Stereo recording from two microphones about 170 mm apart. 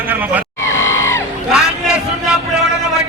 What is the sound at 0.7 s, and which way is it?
Yell, 15° left (ahead or behind).